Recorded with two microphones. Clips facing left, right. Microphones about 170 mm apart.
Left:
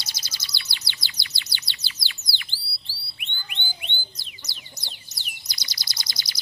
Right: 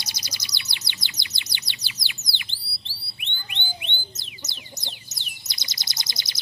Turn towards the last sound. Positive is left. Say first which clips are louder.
# right 1 dB
turn(degrees=-20)  # may be behind; listen again after turning